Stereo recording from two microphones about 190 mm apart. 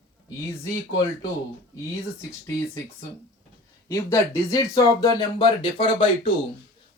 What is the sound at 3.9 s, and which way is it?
Speech, 15° left (ahead or behind).